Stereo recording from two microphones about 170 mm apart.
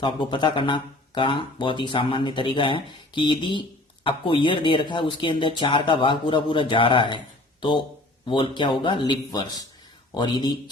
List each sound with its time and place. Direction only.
0.0 s speech: 25° left (ahead or behind)
8.3 s speech: 30° left (ahead or behind)